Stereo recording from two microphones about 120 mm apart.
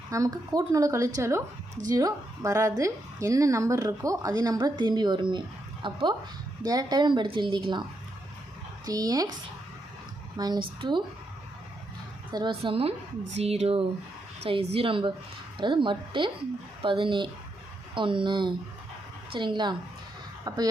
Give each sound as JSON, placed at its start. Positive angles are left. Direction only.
{"t": 0.1, "sound": "a woman's voice", "side_deg": -30}
{"t": 8.9, "sound": "a woman's voice", "side_deg": -30}
{"t": 10.3, "sound": "a woman's voice", "side_deg": -35}
{"t": 12.3, "sound": "a woman's voice", "side_deg": -40}